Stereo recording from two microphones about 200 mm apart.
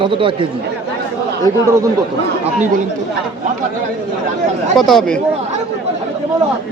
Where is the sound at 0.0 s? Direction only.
25° right (ahead or behind).